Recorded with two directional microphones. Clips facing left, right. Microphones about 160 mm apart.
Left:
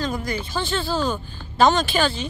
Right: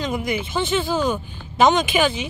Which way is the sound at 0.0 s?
20° right (ahead or behind).